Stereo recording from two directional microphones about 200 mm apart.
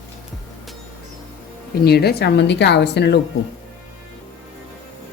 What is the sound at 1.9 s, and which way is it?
A woman's voice, 55° left (ahead or behind).